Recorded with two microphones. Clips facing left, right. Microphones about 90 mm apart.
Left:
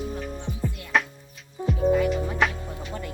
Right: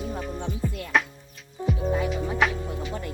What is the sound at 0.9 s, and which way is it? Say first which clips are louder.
Music: even; centre (ahead or behind).